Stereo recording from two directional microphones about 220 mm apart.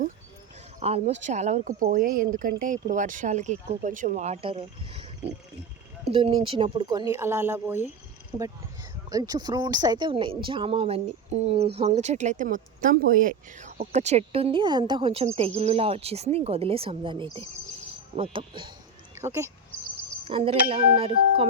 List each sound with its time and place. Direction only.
0.8 s speech: 30° right (ahead or behind)
19.2 s speech: 10° right (ahead or behind)
20.2 s speech: 25° right (ahead or behind)